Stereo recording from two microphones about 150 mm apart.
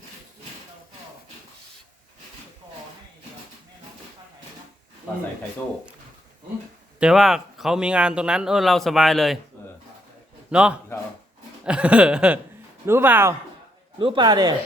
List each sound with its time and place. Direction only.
7.0 s speech: centre (ahead or behind)
10.5 s a sound: 5° right (ahead or behind)
14.0 s speech: 35° right (ahead or behind)